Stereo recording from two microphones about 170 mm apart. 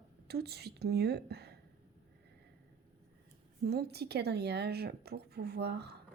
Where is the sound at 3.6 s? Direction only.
70° right (ahead or behind).